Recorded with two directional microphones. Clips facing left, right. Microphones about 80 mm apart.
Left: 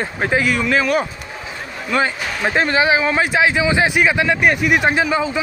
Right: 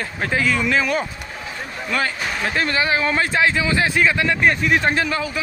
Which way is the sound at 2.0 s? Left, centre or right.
Left.